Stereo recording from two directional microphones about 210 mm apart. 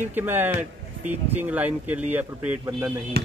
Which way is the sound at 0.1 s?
10° right (ahead or behind).